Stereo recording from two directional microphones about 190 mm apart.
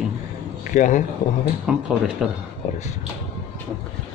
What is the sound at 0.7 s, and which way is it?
Speech, 40° left (ahead or behind).